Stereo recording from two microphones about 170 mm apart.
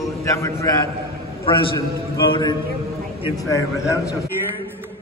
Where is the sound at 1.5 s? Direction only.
30° left (ahead or behind).